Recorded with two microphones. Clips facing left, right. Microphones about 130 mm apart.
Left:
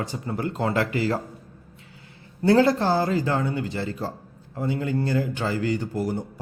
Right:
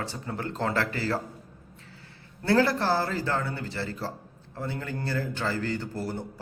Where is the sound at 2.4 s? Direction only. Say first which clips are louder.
Left 5 dB; 20° left (ahead or behind).